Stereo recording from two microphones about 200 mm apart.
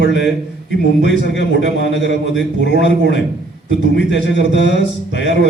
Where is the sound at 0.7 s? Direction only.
60° left (ahead or behind).